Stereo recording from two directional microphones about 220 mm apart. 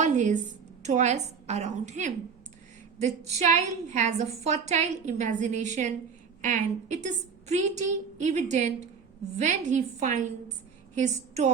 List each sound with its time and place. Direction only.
0.0 s a woman's voice: 35° right (ahead or behind)